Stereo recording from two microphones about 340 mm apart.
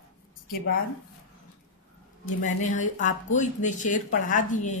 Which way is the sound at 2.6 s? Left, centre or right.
Left.